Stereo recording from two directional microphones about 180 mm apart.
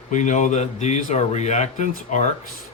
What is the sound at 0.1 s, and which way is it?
Speech, 40° left (ahead or behind).